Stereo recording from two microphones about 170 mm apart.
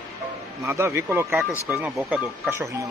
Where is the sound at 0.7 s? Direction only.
15° right (ahead or behind).